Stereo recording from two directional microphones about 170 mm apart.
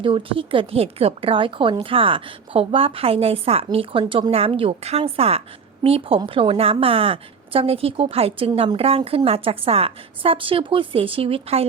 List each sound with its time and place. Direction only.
0.0 s a woman's voice: 30° right (ahead or behind)